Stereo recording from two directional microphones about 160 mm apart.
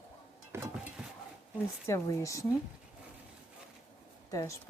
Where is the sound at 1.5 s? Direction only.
20° left (ahead or behind).